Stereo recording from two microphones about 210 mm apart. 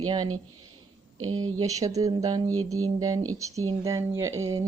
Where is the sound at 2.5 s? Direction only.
90° right.